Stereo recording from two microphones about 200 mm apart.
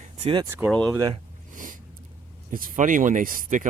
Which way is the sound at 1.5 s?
40° right (ahead or behind).